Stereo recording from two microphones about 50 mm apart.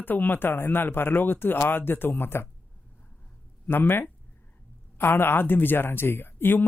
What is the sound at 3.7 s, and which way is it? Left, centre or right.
Speech, left.